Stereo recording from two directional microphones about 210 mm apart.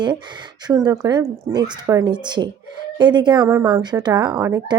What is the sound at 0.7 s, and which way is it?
A woman's voice, 20° right (ahead or behind).